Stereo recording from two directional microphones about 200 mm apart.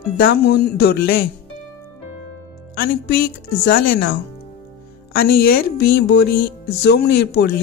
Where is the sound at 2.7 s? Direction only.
50° left (ahead or behind).